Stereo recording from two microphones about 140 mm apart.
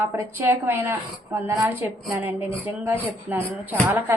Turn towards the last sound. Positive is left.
turn(degrees=-15)  # may be behind; listen again after turning